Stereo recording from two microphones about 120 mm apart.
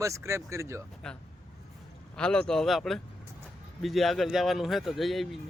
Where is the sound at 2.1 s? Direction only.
5° left (ahead or behind).